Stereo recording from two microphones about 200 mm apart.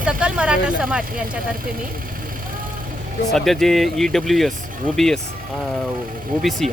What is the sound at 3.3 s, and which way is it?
Speech, centre (ahead or behind).